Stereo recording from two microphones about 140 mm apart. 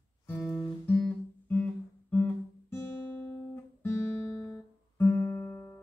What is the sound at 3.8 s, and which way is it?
Guitar, 20° left (ahead or behind).